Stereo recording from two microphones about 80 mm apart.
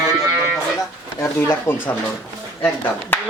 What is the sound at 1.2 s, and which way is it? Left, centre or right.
Speech, left.